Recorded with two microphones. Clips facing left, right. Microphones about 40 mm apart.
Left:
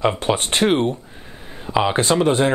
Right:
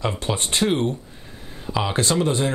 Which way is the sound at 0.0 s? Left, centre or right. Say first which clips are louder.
Left 6 dB; left.